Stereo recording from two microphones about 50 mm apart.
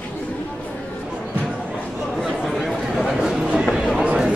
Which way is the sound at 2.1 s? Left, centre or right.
Centre.